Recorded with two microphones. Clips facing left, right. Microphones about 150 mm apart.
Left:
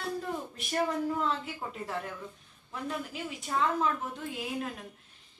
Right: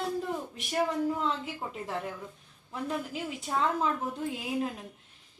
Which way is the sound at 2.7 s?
25° right (ahead or behind).